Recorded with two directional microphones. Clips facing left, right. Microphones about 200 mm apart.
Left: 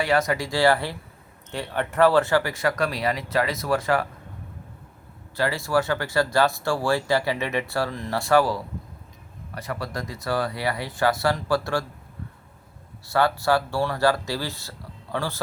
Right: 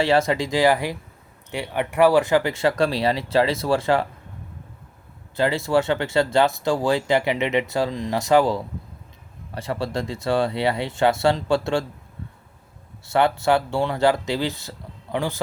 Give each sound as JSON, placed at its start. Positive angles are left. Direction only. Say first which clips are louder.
{"t": 0.0, "sound": "speech", "louder": "right 3 dB", "side_deg": -25}
{"t": 5.4, "sound": "speech", "louder": "right 3 dB", "side_deg": -25}
{"t": 13.1, "sound": "speech", "louder": "right 2 dB", "side_deg": -25}